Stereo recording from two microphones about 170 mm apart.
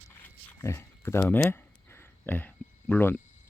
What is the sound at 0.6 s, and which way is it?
Speech, 15° left (ahead or behind).